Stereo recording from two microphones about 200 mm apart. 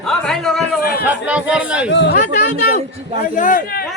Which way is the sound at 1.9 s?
60° left (ahead or behind).